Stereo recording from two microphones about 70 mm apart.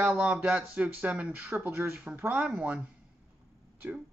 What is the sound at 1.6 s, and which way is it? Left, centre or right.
Speech, right.